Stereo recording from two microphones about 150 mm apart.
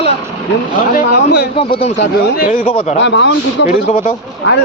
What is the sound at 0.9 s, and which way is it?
Speech, 90° left.